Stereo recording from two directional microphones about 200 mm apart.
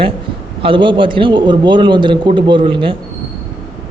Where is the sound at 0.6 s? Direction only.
25° right (ahead or behind).